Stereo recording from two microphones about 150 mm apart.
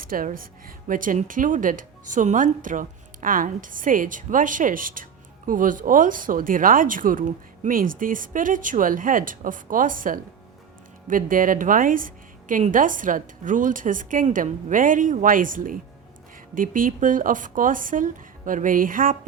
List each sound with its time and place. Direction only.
0.0 s a woman's voice: 70° right (ahead or behind)